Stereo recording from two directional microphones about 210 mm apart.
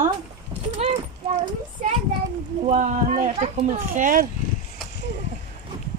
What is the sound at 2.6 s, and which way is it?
Speech, 30° right (ahead or behind).